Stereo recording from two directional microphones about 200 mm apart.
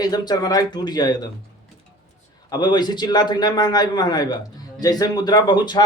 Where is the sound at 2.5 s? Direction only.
20° left (ahead or behind).